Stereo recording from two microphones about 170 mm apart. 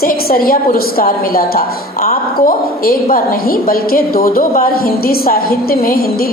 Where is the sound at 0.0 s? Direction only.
60° left (ahead or behind).